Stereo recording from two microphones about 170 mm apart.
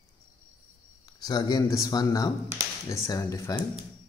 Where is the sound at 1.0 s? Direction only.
25° left (ahead or behind).